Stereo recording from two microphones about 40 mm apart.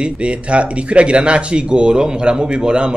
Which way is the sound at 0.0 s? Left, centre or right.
Right.